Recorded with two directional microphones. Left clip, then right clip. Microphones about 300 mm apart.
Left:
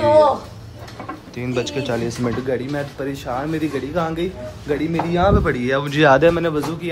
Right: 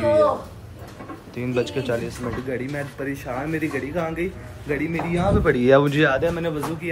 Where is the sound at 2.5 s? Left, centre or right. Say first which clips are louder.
Left 4 dB; centre.